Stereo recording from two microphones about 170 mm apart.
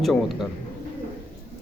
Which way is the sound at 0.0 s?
Centre (ahead or behind).